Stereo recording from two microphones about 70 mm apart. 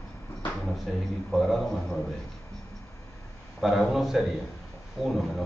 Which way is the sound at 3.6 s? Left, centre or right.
Centre.